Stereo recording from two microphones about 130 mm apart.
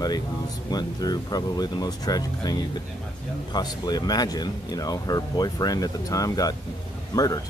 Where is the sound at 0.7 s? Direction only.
30° left (ahead or behind).